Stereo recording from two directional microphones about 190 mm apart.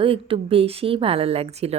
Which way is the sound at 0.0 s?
30° right (ahead or behind).